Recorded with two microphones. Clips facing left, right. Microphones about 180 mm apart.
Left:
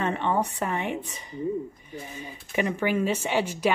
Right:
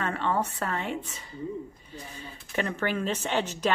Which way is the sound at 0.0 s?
20° left (ahead or behind).